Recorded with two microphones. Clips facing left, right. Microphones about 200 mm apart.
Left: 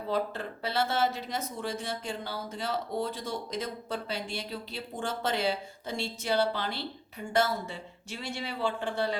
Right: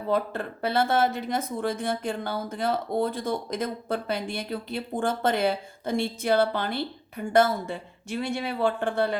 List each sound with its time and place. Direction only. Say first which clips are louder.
0.1 s speech: right 5 dB; 55° right (ahead or behind)